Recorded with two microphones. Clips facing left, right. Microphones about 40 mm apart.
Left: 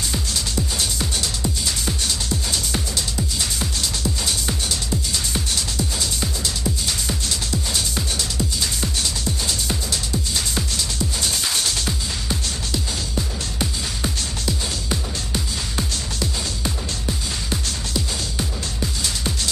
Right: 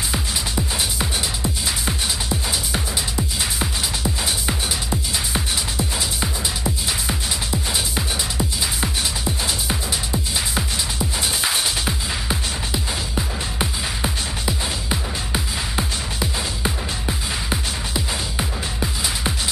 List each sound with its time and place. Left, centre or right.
0.1 s music: centre